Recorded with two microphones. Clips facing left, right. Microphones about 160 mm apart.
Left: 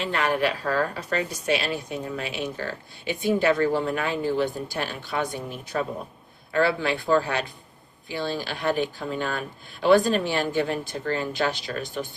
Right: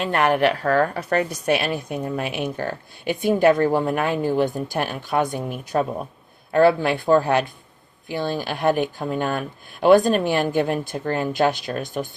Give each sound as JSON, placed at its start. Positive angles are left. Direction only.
{"t": 0.0, "sound": "a woman's voice", "side_deg": -55}